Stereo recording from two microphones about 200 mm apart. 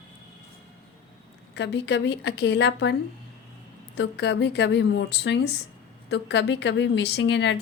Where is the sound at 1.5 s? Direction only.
60° left (ahead or behind).